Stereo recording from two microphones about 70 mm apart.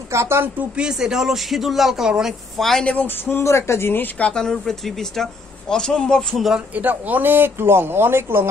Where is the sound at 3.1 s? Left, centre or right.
Left.